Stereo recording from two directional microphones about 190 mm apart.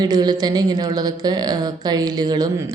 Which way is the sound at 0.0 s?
20° right (ahead or behind).